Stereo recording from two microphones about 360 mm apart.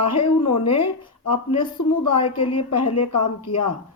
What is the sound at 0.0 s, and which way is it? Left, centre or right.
Speech, left.